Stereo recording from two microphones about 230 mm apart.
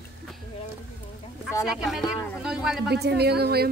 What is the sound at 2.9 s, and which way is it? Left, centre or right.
Speech, right.